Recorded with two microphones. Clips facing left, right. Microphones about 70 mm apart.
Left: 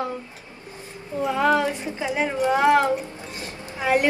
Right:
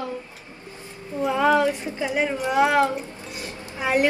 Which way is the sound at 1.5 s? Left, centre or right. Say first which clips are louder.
Right 1 dB; left.